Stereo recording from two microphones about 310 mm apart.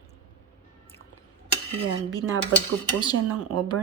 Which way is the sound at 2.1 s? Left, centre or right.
Centre.